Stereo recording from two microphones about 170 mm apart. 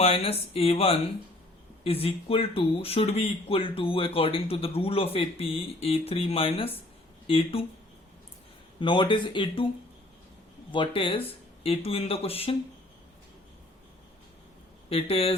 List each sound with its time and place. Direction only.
0.0 s speech: 35° left (ahead or behind)
8.8 s speech: 30° left (ahead or behind)
10.7 s speech: 30° left (ahead or behind)
14.8 s speech: 35° left (ahead or behind)